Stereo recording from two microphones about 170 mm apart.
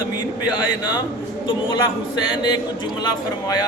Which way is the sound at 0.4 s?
25° left (ahead or behind).